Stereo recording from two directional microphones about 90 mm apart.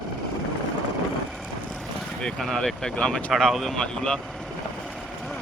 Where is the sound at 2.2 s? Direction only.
10° left (ahead or behind).